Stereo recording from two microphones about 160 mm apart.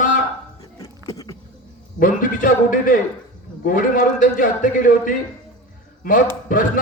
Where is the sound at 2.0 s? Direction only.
55° left (ahead or behind).